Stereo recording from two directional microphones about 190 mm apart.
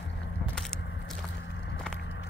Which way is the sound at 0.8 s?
65° left (ahead or behind).